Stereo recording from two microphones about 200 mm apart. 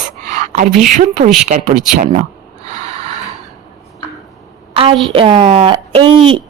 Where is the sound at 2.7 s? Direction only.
35° right (ahead or behind).